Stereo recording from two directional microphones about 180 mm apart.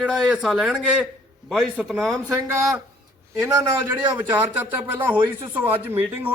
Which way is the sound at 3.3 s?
15° right (ahead or behind).